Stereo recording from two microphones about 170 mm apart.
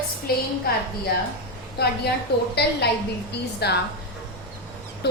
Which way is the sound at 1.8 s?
65° left (ahead or behind).